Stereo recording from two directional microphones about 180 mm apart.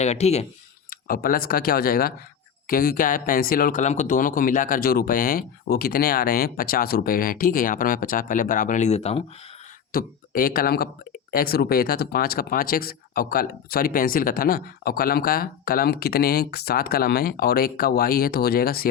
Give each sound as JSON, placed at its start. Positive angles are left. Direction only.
{"t": 0.0, "sound": "speech", "side_deg": 35}
{"t": 0.9, "sound": "speech", "side_deg": 55}
{"t": 9.9, "sound": "speech", "side_deg": 55}